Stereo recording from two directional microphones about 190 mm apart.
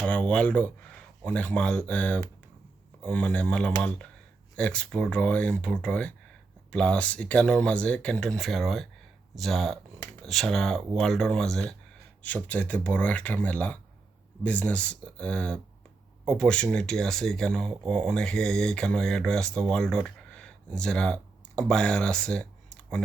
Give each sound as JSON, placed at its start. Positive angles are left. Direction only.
{"t": 0.0, "sound": "speech", "side_deg": 5}